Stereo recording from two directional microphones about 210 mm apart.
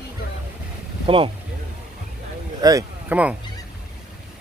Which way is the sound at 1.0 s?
25° right (ahead or behind).